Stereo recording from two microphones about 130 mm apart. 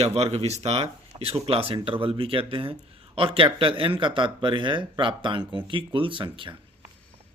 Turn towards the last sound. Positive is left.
turn(degrees=-40)  # may be behind; listen again after turning